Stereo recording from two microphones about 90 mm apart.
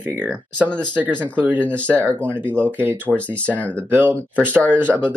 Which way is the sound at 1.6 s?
25° right (ahead or behind).